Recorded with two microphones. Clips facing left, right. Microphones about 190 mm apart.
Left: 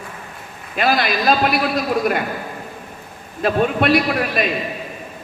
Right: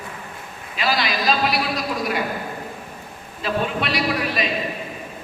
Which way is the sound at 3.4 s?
50° left (ahead or behind).